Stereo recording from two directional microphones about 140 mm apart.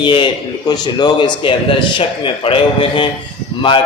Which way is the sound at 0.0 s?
35° left (ahead or behind).